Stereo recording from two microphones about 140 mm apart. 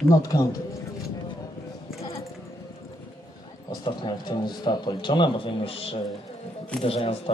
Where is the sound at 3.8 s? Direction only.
30° left (ahead or behind).